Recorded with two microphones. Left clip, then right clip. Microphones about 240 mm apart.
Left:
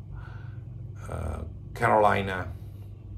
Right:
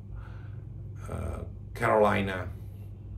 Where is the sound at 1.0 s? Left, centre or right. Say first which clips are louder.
Left 2 dB; centre.